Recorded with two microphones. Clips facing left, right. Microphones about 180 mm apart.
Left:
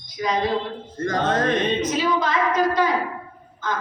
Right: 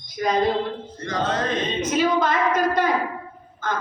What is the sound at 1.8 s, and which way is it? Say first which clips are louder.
A woman's voice: right 2 dB; 55° right (ahead or behind).